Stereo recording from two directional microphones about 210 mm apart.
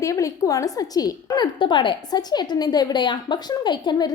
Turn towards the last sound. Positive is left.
turn(degrees=20)  # may be behind; listen again after turning